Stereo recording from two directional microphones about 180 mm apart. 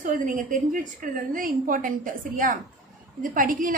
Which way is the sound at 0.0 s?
45° right (ahead or behind).